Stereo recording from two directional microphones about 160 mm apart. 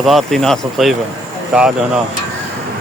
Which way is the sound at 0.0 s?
Centre (ahead or behind).